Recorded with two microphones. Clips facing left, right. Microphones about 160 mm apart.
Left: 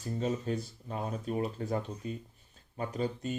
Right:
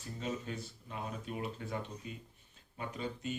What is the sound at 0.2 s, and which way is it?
Speech, 40° left (ahead or behind).